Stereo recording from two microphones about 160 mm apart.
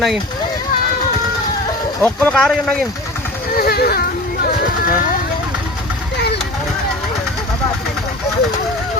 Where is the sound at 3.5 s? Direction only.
70° left (ahead or behind).